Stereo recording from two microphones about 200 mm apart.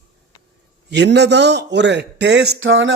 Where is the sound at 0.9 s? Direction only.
60° right (ahead or behind).